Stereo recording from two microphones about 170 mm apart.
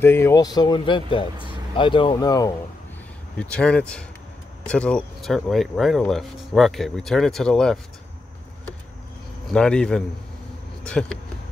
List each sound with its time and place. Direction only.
0.0 s speech: 15° left (ahead or behind)
3.3 s speech: 5° left (ahead or behind)
9.5 s speech: 5° left (ahead or behind)